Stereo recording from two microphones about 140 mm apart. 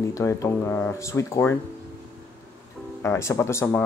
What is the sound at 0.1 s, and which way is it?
Speech, 20° left (ahead or behind).